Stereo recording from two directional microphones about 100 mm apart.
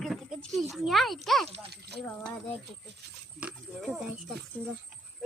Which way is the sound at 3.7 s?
25° right (ahead or behind).